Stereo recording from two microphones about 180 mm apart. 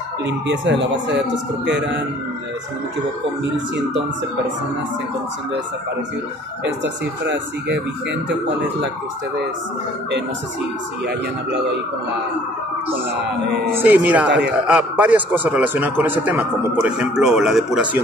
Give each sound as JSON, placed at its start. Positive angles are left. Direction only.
{"t": 0.5, "sound": "speech", "side_deg": -80}
{"t": 7.6, "sound": "speech", "side_deg": -75}
{"t": 13.7, "sound": "a man's voice", "side_deg": -10}